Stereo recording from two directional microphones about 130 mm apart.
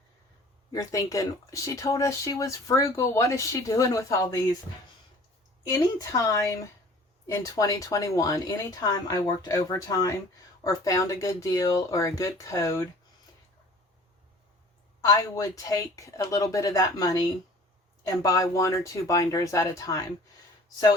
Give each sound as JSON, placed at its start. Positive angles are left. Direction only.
{"t": 0.7, "sound": "speech", "side_deg": 25}
{"t": 5.7, "sound": "speech", "side_deg": 30}
{"t": 15.0, "sound": "speech", "side_deg": 25}